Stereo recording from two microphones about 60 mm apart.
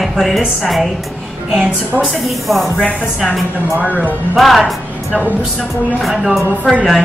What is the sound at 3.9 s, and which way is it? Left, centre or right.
Speech, left.